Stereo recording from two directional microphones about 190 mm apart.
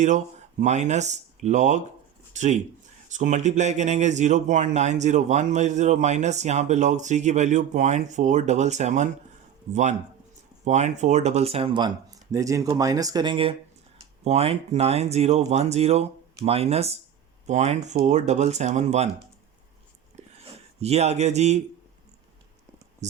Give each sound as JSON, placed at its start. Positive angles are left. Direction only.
{"t": 0.6, "sound": "speech", "side_deg": -35}
{"t": 10.6, "sound": "speech", "side_deg": -35}
{"t": 12.3, "sound": "speech", "side_deg": -15}
{"t": 20.1, "sound": "a sound", "side_deg": -35}